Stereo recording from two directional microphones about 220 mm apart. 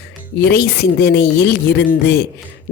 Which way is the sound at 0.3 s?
50° left (ahead or behind).